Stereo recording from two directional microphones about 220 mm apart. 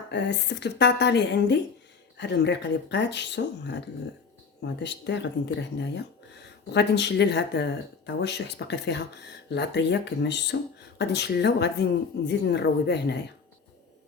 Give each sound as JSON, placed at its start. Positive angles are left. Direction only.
{"t": 0.1, "sound": "speech", "side_deg": 50}